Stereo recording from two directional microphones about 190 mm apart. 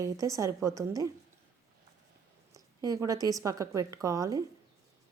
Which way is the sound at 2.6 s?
20° right (ahead or behind).